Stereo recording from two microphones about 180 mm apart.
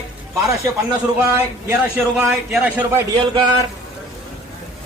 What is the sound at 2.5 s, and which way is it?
Speech, 10° right (ahead or behind).